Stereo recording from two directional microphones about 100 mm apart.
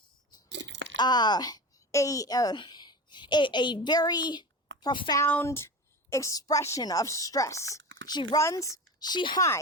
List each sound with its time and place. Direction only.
0.9 s a woman's voice: 45° left (ahead or behind)
5.5 s a woman's voice: 25° left (ahead or behind)
8.1 s speech: 45° left (ahead or behind)
8.4 s speech: 30° left (ahead or behind); by 9.4 s 45° left (ahead or behind)